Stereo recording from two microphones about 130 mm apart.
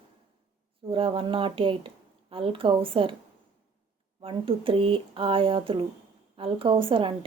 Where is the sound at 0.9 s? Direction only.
45° right (ahead or behind).